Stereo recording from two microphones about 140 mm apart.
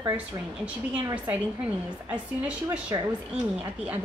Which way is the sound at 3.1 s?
10° right (ahead or behind).